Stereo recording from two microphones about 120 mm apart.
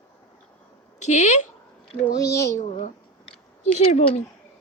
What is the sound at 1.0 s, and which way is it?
Speech, 75° left (ahead or behind).